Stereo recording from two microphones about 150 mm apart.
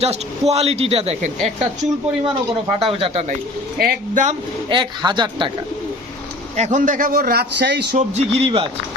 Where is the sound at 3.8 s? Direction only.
70° right (ahead or behind).